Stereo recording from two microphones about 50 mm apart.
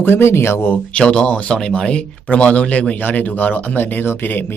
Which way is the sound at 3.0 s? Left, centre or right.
Left.